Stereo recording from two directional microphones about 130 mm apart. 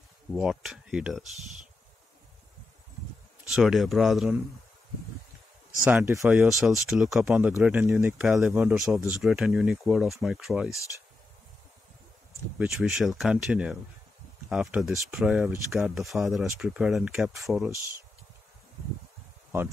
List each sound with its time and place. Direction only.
0.3 s speech: 5° right (ahead or behind)
3.4 s speech: centre (ahead or behind)
5.8 s speech: 20° right (ahead or behind)
6.2 s speech: 5° right (ahead or behind)
7.2 s speech: 15° right (ahead or behind)
8.2 s speech: 5° right (ahead or behind)
12.5 s speech: 5° right (ahead or behind)